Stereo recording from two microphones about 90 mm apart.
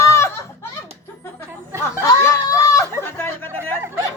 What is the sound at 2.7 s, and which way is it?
Chatter, 30° left (ahead or behind).